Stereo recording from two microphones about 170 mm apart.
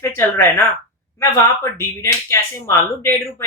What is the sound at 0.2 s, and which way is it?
Speech, 15° left (ahead or behind).